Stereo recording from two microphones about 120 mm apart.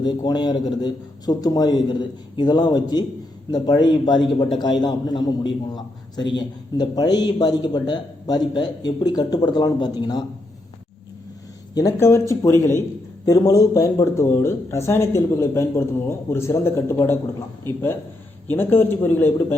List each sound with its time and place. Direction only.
0.0 s a man's voice: 35° left (ahead or behind)
11.7 s a man's voice: 30° left (ahead or behind); by 19.5 s 15° left (ahead or behind)